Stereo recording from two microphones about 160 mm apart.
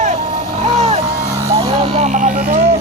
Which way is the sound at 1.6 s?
40° right (ahead or behind).